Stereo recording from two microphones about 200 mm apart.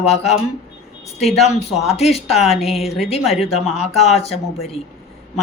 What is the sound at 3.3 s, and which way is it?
Speech, 30° left (ahead or behind).